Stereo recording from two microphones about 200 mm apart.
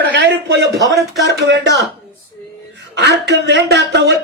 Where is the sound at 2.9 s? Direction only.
55° right (ahead or behind).